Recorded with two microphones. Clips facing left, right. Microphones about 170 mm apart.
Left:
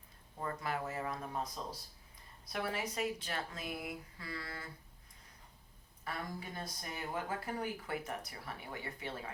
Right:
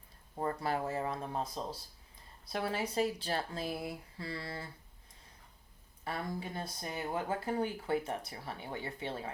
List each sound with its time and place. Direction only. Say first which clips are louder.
0.3 s speech: right 5 dB; 35° right (ahead or behind)
6.1 s speech: right 4 dB; 30° right (ahead or behind)